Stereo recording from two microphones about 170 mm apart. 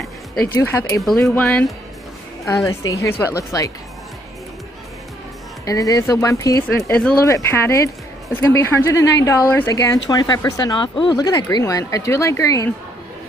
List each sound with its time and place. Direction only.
0.5 s speech: 15° left (ahead or behind)
1.0 s speech: 5° left (ahead or behind)
2.4 s speech: 20° left (ahead or behind)
5.7 s speech: 20° left (ahead or behind)
6.9 s speech: 5° left (ahead or behind)
7.2 s speech: 15° left (ahead or behind)